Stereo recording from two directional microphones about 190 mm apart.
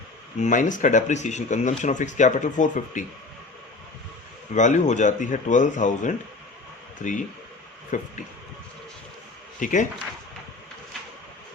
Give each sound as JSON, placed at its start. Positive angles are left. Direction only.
{"t": 0.3, "sound": "speech", "side_deg": 40}
{"t": 4.5, "sound": "speech", "side_deg": 40}
{"t": 9.6, "sound": "speech", "side_deg": 40}